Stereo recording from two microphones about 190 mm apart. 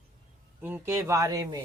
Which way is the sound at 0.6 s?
10° right (ahead or behind).